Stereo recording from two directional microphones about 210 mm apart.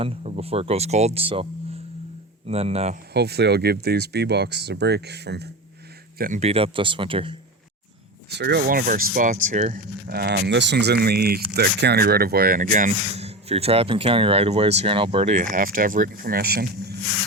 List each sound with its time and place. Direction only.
0.0 s speech: 30° right (ahead or behind)
2.5 s speech: 30° right (ahead or behind)
3.1 s speech: 50° right (ahead or behind)
6.1 s speech: 40° right (ahead or behind)
8.3 s speech: 50° right (ahead or behind)